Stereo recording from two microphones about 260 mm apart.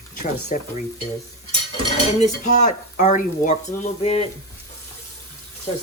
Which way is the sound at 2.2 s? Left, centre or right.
Left.